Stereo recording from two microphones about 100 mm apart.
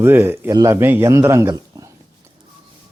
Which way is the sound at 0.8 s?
20° right (ahead or behind).